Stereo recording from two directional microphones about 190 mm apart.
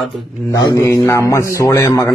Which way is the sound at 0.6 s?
15° left (ahead or behind).